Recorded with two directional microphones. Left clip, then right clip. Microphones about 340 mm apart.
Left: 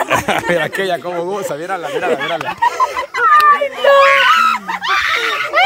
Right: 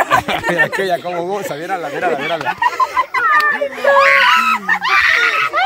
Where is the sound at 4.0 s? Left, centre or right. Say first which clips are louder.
Right 1 dB; centre.